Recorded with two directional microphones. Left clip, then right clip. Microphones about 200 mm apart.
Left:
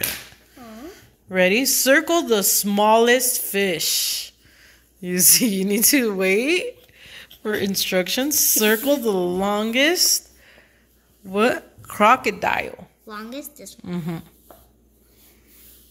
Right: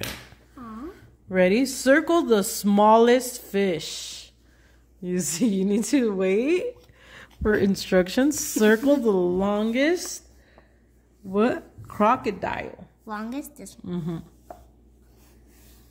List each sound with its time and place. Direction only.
0.8 s a woman's voice: 15° right (ahead or behind); by 12.8 s 5° left (ahead or behind)
13.0 s a woman's voice: 55° right (ahead or behind)
13.8 s speech: 5° left (ahead or behind)